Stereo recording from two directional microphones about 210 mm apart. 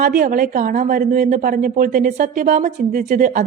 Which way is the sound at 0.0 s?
40° right (ahead or behind).